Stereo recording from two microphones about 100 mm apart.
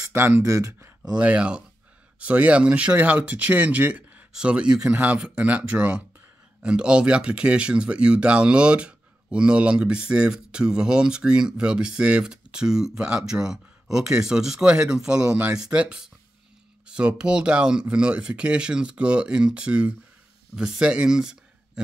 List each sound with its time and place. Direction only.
0.0 s speech: 25° right (ahead or behind)
1.1 s speech: 10° right (ahead or behind)